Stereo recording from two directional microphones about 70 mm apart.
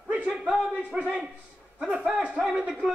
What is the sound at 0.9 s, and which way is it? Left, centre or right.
Speech, right.